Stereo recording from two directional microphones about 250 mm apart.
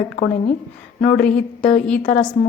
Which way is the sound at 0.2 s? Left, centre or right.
Left.